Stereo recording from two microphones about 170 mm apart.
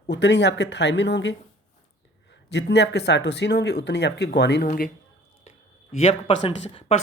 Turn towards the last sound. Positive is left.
turn(degrees=35)  # may be behind; listen again after turning